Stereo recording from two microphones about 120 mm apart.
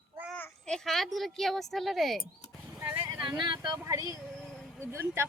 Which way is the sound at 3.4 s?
35° right (ahead or behind).